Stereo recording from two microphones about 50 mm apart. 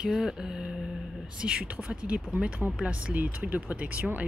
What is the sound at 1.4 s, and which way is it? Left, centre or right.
Speech, right.